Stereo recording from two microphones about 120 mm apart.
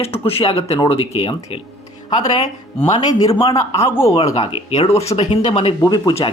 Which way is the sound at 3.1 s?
30° left (ahead or behind).